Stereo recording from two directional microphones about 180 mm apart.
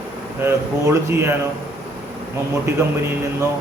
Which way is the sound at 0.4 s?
15° right (ahead or behind).